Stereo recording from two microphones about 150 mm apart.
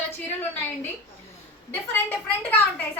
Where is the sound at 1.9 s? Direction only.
15° left (ahead or behind).